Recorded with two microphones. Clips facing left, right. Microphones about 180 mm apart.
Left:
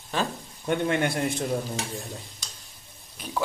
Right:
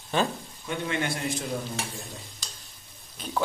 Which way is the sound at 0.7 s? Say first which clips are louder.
Left 5 dB; 55° left (ahead or behind).